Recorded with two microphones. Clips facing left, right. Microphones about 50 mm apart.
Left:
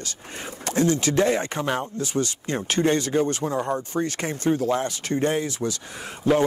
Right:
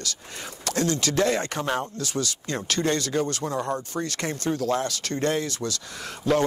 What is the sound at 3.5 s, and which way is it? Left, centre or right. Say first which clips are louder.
Speech: left 2 dB; centre.